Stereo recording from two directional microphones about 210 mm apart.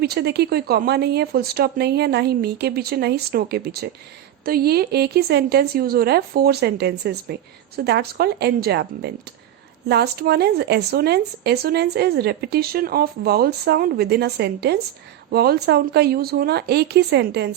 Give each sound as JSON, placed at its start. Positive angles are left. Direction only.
{"t": 0.0, "sound": "speech", "side_deg": -50}